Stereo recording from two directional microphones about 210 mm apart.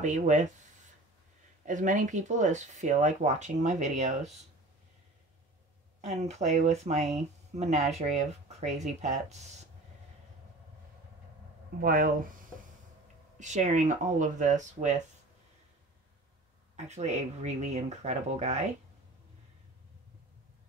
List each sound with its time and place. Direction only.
0.0 s speech: 35° right (ahead or behind)
1.7 s speech: 35° right (ahead or behind)
5.9 s speech: 30° right (ahead or behind)
11.8 s speech: 40° right (ahead or behind)
13.4 s speech: 35° right (ahead or behind)
16.7 s speech: 35° right (ahead or behind)